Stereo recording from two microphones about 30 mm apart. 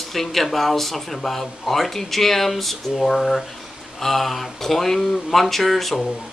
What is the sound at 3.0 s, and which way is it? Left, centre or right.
Speech, centre.